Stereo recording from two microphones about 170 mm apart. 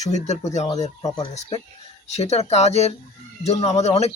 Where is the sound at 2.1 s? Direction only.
40° left (ahead or behind).